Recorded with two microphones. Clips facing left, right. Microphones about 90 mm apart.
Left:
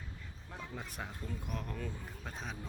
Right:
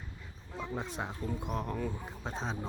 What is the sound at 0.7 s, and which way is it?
Speech, 25° right (ahead or behind).